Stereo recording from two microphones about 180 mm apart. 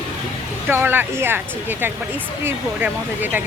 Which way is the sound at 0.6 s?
10° right (ahead or behind).